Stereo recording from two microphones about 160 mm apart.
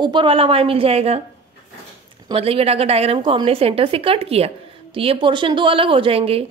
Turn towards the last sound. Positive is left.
turn(degrees=-35)  # may be behind; listen again after turning